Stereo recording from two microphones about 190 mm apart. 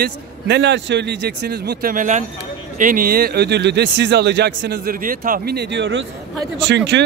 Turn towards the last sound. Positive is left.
turn(degrees=-70)  # may be behind; listen again after turning